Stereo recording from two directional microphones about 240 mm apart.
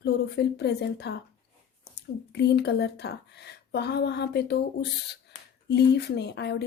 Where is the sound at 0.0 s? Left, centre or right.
Left.